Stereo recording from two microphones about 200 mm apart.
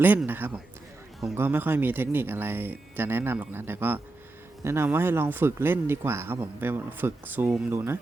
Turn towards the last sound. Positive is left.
turn(degrees=-10)  # may be behind; listen again after turning